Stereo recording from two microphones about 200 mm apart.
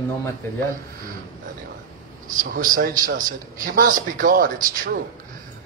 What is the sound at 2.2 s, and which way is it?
Speech, 40° right (ahead or behind).